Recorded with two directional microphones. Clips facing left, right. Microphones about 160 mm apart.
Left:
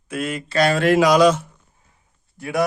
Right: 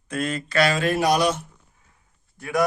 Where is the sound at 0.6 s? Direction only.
60° left (ahead or behind); by 1.4 s 90° left.